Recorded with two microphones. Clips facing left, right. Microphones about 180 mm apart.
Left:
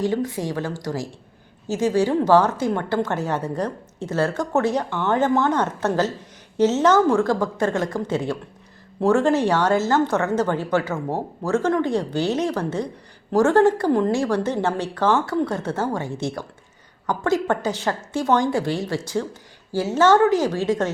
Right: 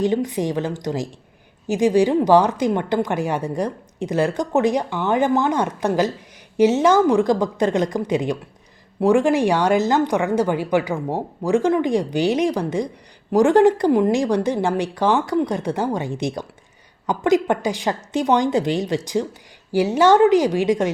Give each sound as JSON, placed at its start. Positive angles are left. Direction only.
{"t": 0.0, "sound": "a woman's voice", "side_deg": -20}